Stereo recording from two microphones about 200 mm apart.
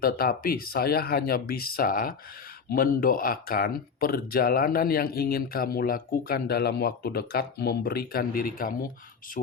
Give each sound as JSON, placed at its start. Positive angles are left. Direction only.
{"t": 0.0, "sound": "speech", "side_deg": 50}